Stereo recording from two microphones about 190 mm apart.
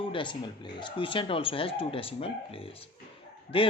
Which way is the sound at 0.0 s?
25° left (ahead or behind).